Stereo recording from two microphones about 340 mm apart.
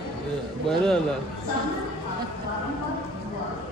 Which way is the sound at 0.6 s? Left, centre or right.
Centre.